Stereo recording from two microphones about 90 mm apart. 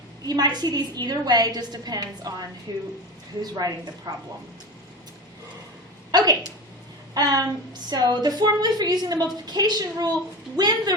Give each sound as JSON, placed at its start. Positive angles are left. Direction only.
{"t": 0.3, "sound": "a woman's voice", "side_deg": -50}
{"t": 6.1, "sound": "a sound", "side_deg": -45}
{"t": 7.1, "sound": "a woman's voice", "side_deg": -45}